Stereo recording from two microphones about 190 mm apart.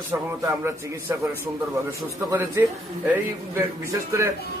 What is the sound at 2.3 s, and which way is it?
A man's voice, 15° right (ahead or behind).